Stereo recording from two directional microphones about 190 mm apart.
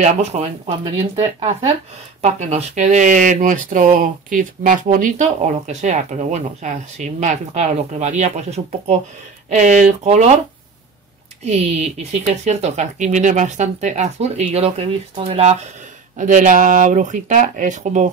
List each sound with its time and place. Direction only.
0.0 s speech: 35° right (ahead or behind)
11.5 s speech: 35° right (ahead or behind)